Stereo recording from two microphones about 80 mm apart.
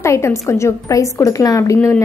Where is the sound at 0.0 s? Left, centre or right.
Left.